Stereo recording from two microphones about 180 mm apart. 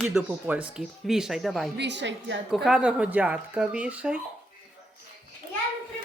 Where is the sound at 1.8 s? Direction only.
75° right (ahead or behind).